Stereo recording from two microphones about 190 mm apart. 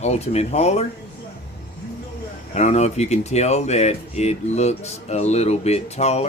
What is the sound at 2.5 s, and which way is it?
Speech, 35° left (ahead or behind).